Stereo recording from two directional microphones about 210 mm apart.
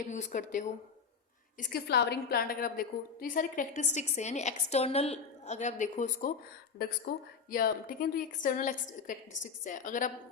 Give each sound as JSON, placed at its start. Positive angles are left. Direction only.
{"t": 0.0, "sound": "a woman's voice", "side_deg": 35}
{"t": 1.5, "sound": "a woman's voice", "side_deg": 50}
{"t": 6.8, "sound": "a woman's voice", "side_deg": 50}